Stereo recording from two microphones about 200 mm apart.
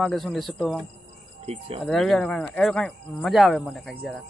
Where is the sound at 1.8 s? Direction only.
Centre (ahead or behind).